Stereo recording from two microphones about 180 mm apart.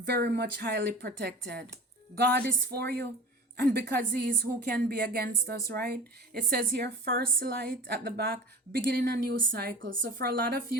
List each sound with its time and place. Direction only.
0.0 s a woman's voice: 65° right (ahead or behind)
2.7 s a woman's voice: 60° right (ahead or behind); by 10.1 s 90° right
10.2 s a woman's voice: 55° right (ahead or behind)